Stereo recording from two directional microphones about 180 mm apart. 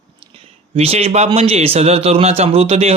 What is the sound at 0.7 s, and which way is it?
Speech, 35° right (ahead or behind).